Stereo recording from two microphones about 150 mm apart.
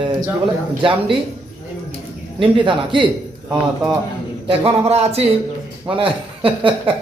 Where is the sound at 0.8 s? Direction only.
35° right (ahead or behind).